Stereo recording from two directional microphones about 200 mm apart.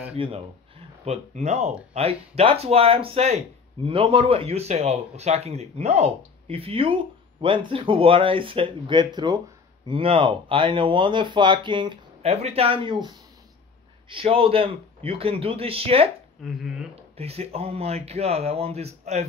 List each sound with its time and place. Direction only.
0.1 s a man's voice: 30° right (ahead or behind)
16.4 s speech: 5° right (ahead or behind)
17.2 s speech: 30° right (ahead or behind)